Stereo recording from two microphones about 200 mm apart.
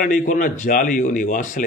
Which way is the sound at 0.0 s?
40° left (ahead or behind).